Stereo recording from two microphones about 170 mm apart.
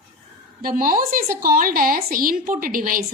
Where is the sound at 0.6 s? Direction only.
55° right (ahead or behind).